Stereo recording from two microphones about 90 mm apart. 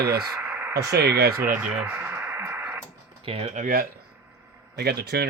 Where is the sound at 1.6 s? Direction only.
15° right (ahead or behind).